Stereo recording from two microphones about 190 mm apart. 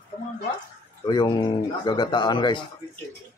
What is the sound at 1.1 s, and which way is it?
Speech, 25° left (ahead or behind).